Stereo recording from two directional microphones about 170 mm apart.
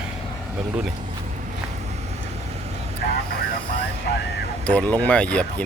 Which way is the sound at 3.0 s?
65° left (ahead or behind).